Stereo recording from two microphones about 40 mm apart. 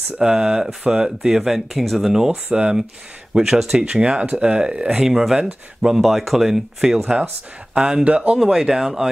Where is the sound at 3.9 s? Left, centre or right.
Right.